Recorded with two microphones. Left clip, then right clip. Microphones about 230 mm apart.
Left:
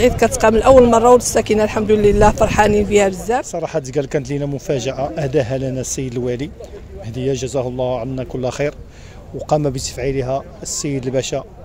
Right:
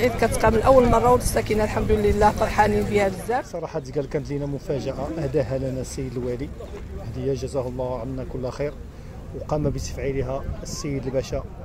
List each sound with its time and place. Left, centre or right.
0.0 s speech: left